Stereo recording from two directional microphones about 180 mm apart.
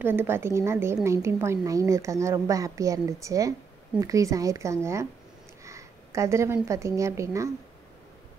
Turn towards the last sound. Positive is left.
turn(degrees=-15)  # may be behind; listen again after turning